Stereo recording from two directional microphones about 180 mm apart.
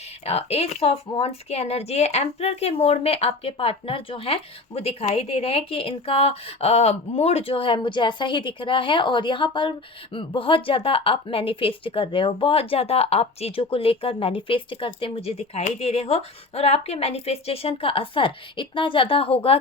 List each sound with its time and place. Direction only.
0.3 s speech: 35° left (ahead or behind)